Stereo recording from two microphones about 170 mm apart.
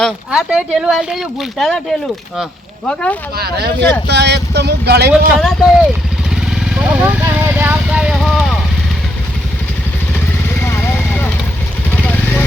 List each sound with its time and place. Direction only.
0.0 s speech: 5° right (ahead or behind)
3.3 s speech: 70° right (ahead or behind)
4.0 s speech: 80° right
5.4 s speech: centre (ahead or behind)
6.5 s vehicle: 5° right (ahead or behind)
10.6 s vehicle: 15° left (ahead or behind)